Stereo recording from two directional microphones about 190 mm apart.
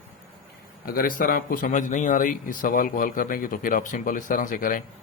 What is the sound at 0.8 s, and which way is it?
Speech, 50° left (ahead or behind).